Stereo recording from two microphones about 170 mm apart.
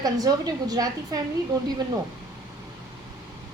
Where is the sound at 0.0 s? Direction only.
20° right (ahead or behind).